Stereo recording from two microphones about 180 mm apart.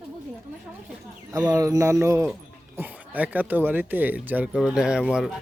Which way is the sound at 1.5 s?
20° right (ahead or behind).